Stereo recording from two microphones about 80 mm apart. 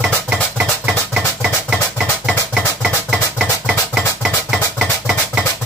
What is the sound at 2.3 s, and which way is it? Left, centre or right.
Music, centre.